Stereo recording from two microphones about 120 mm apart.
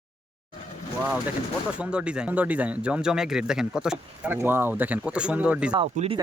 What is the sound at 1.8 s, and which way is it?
Speech, 10° right (ahead or behind).